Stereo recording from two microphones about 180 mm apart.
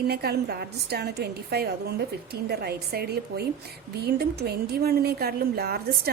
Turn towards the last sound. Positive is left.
turn(degrees=-60)  # may be behind; listen again after turning